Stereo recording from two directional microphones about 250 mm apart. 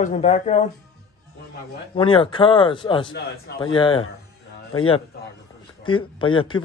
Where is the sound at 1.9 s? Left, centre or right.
Left.